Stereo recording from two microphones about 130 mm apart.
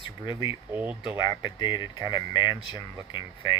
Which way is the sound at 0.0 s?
40° left (ahead or behind).